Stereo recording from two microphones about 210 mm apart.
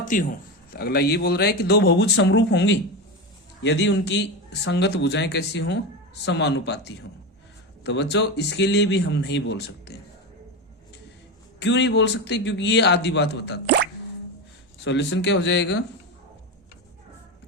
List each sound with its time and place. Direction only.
0.0 s a man's voice: 40° left (ahead or behind)
11.6 s a man's voice: 55° left (ahead or behind)
14.8 s a man's voice: 55° left (ahead or behind)